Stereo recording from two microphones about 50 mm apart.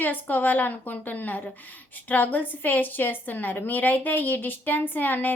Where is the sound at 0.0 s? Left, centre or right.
Left.